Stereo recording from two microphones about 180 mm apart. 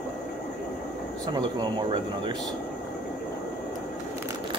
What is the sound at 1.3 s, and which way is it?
Speech, 25° right (ahead or behind).